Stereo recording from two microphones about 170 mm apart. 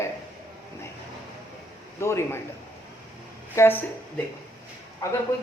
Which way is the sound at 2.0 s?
15° left (ahead or behind).